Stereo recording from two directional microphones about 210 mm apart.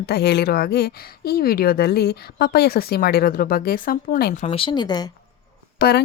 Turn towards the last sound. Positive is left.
turn(degrees=50)  # may be behind; listen again after turning